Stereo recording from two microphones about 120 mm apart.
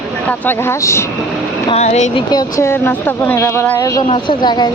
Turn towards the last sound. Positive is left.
turn(degrees=35)  # may be behind; listen again after turning